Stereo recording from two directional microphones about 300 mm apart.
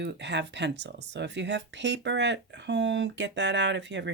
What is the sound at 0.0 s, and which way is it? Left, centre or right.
Speech, right.